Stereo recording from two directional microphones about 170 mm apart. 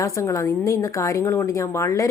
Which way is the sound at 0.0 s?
20° left (ahead or behind).